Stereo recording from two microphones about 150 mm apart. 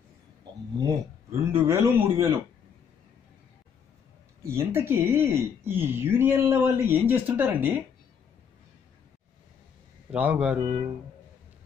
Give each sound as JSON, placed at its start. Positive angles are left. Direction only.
{"t": 0.7, "sound": "a man's voice", "side_deg": -20}
{"t": 4.5, "sound": "speech", "side_deg": -15}
{"t": 10.1, "sound": "speech", "side_deg": -10}